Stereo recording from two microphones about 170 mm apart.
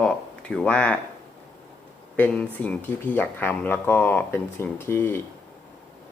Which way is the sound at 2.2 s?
10° left (ahead or behind).